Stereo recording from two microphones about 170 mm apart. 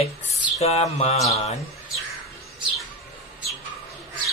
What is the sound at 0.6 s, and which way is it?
Mantra, 35° left (ahead or behind).